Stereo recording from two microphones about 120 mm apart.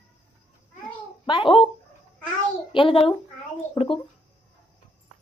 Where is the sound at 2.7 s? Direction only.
45° left (ahead or behind).